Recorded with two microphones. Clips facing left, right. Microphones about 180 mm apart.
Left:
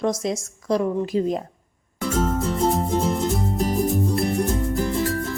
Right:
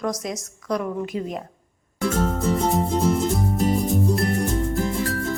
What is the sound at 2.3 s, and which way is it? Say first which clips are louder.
Music: even; centre (ahead or behind).